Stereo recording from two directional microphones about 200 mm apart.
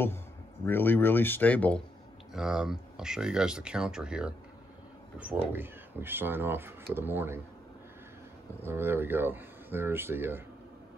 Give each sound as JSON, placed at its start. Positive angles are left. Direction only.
{"t": 0.7, "sound": "speech", "side_deg": 10}
{"t": 2.3, "sound": "speech", "side_deg": -5}
{"t": 8.6, "sound": "speech", "side_deg": -10}